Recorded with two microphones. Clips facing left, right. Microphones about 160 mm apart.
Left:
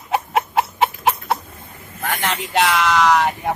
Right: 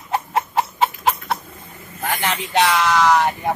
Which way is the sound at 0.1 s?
15° left (ahead or behind).